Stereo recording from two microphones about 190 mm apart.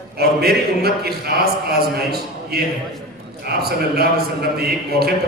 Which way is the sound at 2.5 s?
55° right (ahead or behind).